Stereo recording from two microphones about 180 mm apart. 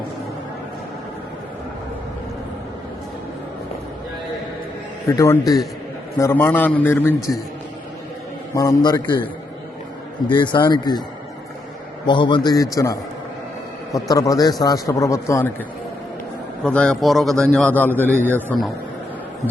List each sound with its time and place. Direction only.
5.0 s a man's voice: 15° left (ahead or behind)
8.5 s speech: 20° left (ahead or behind)
10.2 s speech: 25° left (ahead or behind)
12.0 s a man's voice: 25° left (ahead or behind)
16.6 s a man's voice: 5° left (ahead or behind)